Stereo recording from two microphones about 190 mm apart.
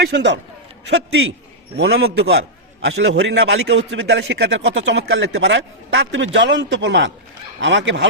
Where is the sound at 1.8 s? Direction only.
85° right.